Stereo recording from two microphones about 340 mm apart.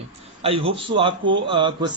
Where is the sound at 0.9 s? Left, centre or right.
Centre.